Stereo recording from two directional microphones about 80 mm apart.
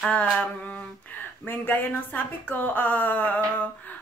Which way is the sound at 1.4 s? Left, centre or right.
Left.